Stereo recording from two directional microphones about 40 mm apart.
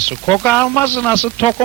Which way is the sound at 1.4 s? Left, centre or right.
Left.